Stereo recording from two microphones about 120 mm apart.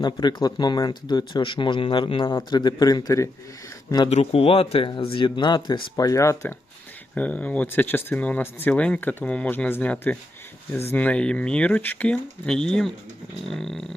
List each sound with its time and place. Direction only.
0.0 s speech: 35° left (ahead or behind)
4.1 s speech: 60° left (ahead or behind); by 6.5 s 25° left (ahead or behind)
7.2 s speech: 10° left (ahead or behind)
13.4 s a sound: 5° left (ahead or behind)